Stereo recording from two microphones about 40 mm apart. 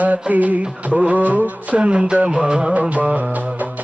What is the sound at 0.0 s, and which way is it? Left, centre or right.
Music, right.